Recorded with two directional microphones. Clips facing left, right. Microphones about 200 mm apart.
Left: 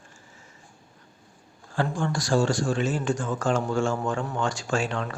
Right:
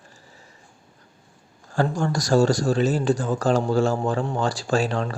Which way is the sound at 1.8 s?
40° right (ahead or behind).